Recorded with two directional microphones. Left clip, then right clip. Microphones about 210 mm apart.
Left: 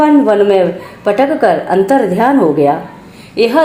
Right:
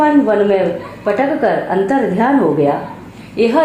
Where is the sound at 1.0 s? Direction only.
45° left (ahead or behind).